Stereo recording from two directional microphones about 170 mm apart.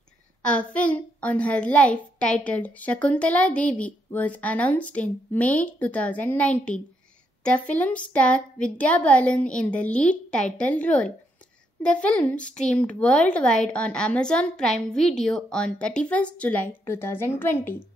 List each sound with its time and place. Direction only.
0.5 s a child's voice: 5° left (ahead or behind)